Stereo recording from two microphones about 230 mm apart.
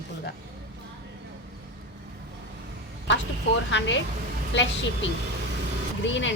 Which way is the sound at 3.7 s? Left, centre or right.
Left.